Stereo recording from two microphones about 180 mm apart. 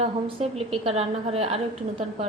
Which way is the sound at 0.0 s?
35° right (ahead or behind).